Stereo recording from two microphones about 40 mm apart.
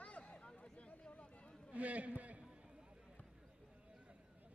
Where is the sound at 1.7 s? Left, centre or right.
Right.